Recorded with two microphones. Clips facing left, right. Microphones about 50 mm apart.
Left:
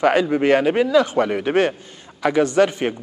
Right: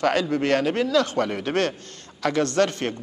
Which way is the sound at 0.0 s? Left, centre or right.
Centre.